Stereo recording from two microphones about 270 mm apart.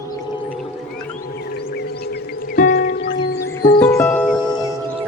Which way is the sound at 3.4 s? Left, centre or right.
Centre.